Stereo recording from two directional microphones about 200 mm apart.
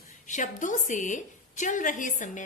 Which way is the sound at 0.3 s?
40° left (ahead or behind).